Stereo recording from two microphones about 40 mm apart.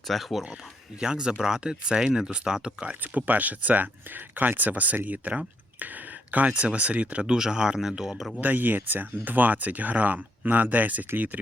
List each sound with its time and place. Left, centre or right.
0.1 s speech: centre
0.9 s speech: centre
3.0 s speech: right
5.8 s a sound: right
6.5 s speech: right
7.3 s speech: centre
8.4 s speech: right